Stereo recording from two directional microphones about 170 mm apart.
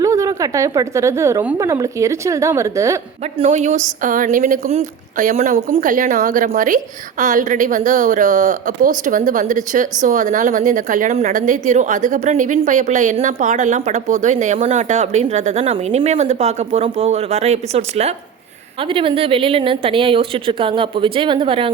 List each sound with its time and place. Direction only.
0.0 s speech: 20° right (ahead or behind)
3.3 s speech: 40° right (ahead or behind)
4.0 s a woman's voice: 50° right (ahead or behind); by 21.7 s 30° right (ahead or behind)